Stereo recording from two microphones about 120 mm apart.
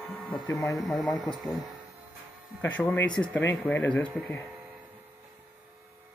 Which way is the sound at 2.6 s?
10° left (ahead or behind).